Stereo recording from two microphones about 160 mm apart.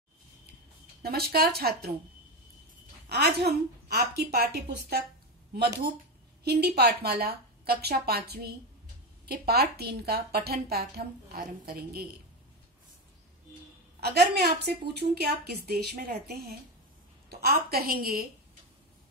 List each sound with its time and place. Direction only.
1.0 s a woman's voice: 75° right (ahead or behind)
3.4 s a woman's voice: 80° right
6.4 s a woman's voice: 90° right; by 12.1 s 70° right (ahead or behind)
13.9 s a woman's voice: 85° right